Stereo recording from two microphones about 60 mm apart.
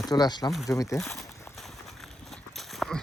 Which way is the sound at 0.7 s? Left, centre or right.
Left.